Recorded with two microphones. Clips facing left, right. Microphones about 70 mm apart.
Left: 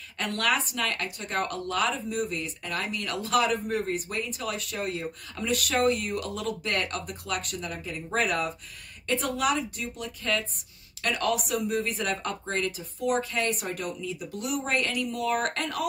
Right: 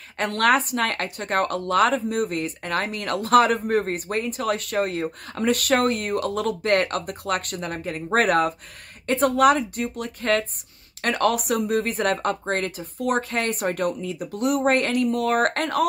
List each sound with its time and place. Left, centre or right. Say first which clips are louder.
0.2 s speech: right 7 dB; right